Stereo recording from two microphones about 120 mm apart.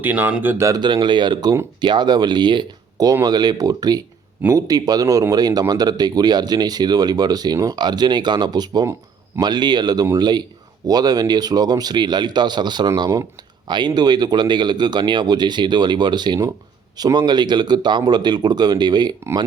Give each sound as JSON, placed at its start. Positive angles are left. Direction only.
{"t": 0.0, "sound": "speech", "side_deg": -15}
{"t": 0.6, "sound": "speech", "side_deg": -35}
{"t": 13.0, "sound": "speech", "side_deg": -25}
{"t": 13.7, "sound": "speech", "side_deg": -40}